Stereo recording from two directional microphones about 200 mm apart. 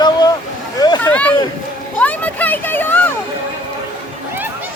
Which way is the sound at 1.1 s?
5° left (ahead or behind).